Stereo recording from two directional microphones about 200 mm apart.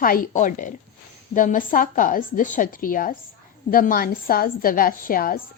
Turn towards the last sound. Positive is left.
turn(degrees=45)  # may be behind; listen again after turning